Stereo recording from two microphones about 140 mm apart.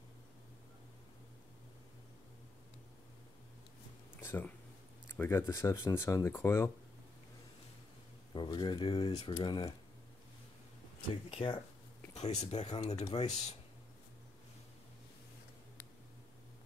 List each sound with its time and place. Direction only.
4.2 s speech: 15° left (ahead or behind)
8.3 s speech: 35° left (ahead or behind)
11.2 s speech: 40° left (ahead or behind)
12.1 s speech: 55° left (ahead or behind)